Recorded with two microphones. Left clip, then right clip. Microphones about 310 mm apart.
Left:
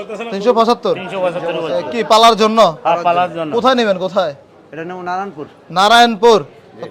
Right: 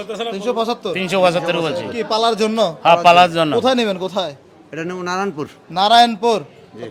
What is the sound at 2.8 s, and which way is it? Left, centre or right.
Speech, right.